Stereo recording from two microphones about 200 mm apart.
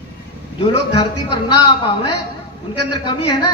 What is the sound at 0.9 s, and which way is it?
A man's voice, 20° left (ahead or behind).